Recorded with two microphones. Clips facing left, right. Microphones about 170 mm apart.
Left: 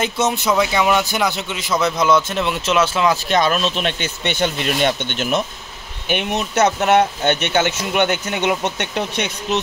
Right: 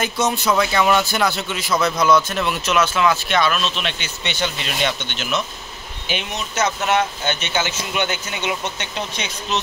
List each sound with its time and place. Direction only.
0.0 s speech: 20° left (ahead or behind); by 9.6 s 60° left (ahead or behind)